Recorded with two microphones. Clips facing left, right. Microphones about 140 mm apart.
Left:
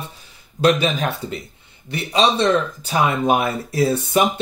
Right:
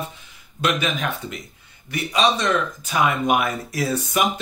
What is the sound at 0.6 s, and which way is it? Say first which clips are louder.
Speech: left 6 dB; 35° left (ahead or behind).